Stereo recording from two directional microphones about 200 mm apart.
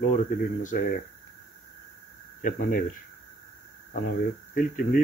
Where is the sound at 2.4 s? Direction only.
40° left (ahead or behind).